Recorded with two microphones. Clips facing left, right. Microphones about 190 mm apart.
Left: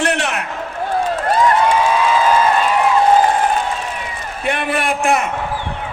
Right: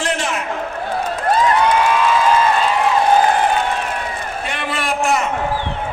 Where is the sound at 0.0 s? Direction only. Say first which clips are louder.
Left 2 dB; 65° left (ahead or behind).